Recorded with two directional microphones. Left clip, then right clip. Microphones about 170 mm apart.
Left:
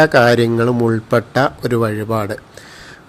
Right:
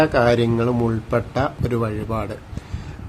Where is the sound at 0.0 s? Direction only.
25° left (ahead or behind).